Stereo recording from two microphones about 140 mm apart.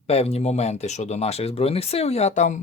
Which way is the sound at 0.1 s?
45° left (ahead or behind).